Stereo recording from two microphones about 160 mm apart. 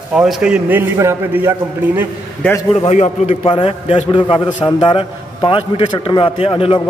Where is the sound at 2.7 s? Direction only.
40° left (ahead or behind).